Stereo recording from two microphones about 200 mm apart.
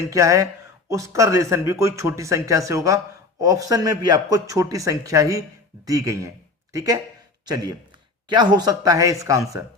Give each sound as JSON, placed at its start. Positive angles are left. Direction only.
{"t": 0.1, "sound": "speech", "side_deg": -15}